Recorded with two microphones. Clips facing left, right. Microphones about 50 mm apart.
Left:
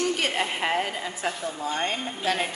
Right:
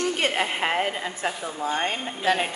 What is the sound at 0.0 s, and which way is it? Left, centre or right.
A woman's voice, right.